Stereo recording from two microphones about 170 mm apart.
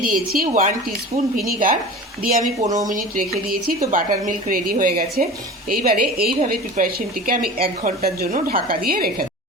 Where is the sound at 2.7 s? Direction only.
50° right (ahead or behind).